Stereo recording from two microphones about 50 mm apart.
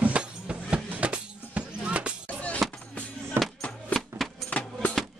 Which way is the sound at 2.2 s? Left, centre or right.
Left.